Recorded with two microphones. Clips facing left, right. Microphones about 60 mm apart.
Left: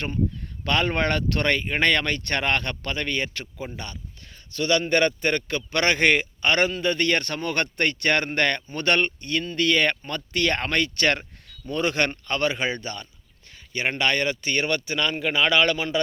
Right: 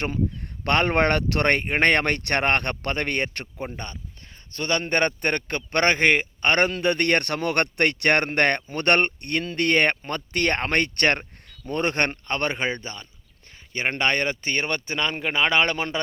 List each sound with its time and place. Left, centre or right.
0.6 s speech: right
4.5 s speech: right
6.4 s speech: right
14.0 s speech: right